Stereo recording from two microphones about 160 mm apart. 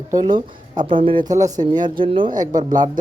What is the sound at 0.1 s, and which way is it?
Speech, 25° right (ahead or behind).